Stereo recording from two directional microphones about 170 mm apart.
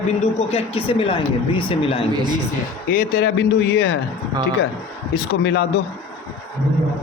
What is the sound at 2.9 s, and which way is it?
Speech, 75° left (ahead or behind).